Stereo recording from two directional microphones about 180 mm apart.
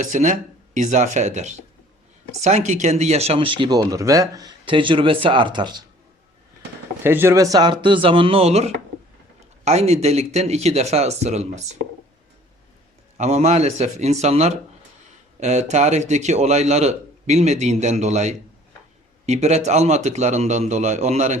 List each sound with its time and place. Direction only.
0.0 s speech: 45° right (ahead or behind); by 5.8 s 25° right (ahead or behind)
7.0 s speech: 10° right (ahead or behind); by 11.8 s 40° right (ahead or behind)
13.1 s speech: 40° right (ahead or behind)